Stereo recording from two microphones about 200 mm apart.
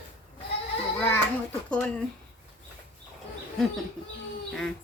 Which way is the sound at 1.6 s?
5° left (ahead or behind).